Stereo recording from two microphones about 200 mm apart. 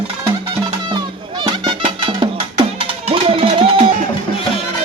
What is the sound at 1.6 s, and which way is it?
Music, 25° right (ahead or behind).